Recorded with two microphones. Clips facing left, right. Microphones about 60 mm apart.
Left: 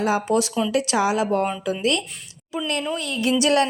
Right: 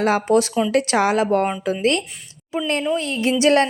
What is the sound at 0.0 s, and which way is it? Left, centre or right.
A woman's voice, right.